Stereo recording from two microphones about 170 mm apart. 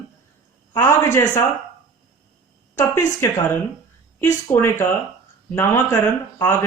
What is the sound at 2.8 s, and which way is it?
Speech, 15° left (ahead or behind).